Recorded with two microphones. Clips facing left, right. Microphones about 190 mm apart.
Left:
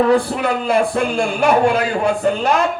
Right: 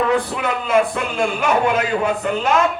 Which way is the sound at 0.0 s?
35° left (ahead or behind).